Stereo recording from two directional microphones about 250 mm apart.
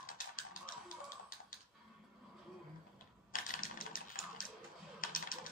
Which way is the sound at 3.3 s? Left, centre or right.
Left.